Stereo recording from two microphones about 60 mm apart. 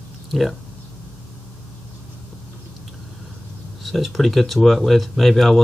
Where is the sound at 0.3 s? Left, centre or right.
Centre.